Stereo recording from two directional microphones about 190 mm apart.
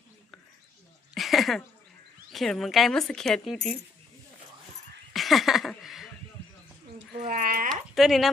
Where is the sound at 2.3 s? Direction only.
Centre (ahead or behind).